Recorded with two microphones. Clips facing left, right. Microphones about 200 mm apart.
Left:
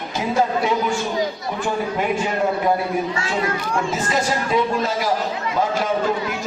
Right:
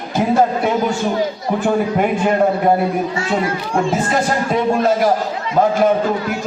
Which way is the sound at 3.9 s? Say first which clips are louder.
Right 4 dB; 55° right (ahead or behind).